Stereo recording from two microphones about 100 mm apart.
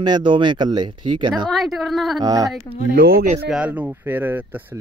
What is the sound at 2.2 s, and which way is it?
Speech, 40° right (ahead or behind).